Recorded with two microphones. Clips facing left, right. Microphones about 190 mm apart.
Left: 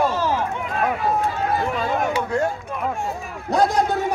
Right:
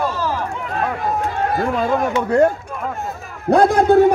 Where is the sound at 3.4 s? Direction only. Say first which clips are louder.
Right 6 dB; 55° right (ahead or behind).